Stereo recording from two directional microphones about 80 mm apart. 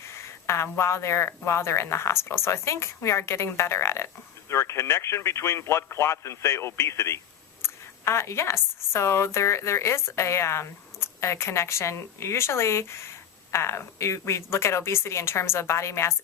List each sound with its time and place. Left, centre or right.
0.2 s speech: left